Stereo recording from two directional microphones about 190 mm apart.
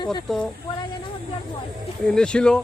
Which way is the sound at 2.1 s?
5° left (ahead or behind).